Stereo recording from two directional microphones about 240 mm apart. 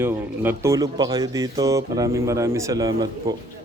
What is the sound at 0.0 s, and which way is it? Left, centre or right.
Speech, centre.